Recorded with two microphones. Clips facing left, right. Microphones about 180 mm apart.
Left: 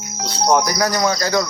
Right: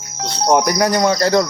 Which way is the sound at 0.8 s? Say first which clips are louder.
Right 3 dB; 25° right (ahead or behind).